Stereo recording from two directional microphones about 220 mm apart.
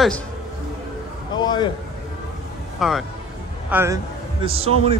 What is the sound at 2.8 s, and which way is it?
Speech, centre (ahead or behind).